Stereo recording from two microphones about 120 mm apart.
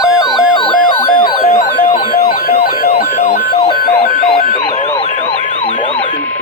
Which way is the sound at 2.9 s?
85° left.